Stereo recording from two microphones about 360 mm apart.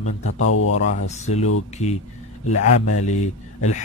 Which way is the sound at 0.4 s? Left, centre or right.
Left.